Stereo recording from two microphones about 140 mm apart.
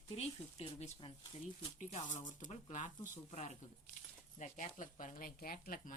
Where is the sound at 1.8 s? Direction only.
60° left (ahead or behind).